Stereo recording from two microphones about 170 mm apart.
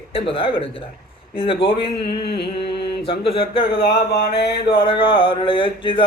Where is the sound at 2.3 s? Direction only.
75° left (ahead or behind).